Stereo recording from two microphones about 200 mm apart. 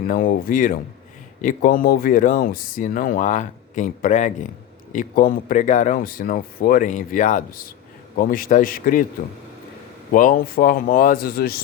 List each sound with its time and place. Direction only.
0.1 s speech: 45° left (ahead or behind)
10.1 s speech: 45° left (ahead or behind)